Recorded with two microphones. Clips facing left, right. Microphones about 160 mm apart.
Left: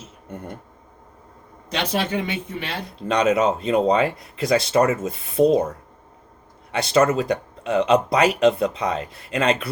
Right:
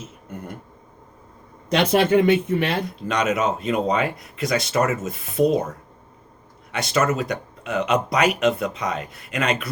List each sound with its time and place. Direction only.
0.3 s speech: 30° left (ahead or behind)
1.7 s speech: 55° right (ahead or behind)
2.8 s speech: 30° left (ahead or behind)
6.7 s speech: 30° left (ahead or behind)